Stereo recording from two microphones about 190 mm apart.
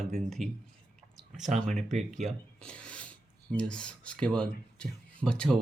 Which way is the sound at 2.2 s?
5° left (ahead or behind).